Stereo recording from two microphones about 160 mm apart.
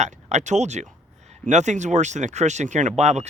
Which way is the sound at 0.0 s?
45° right (ahead or behind).